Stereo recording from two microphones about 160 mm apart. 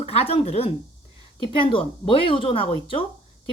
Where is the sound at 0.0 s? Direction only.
40° left (ahead or behind).